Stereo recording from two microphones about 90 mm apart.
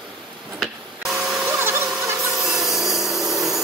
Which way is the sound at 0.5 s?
5° right (ahead or behind).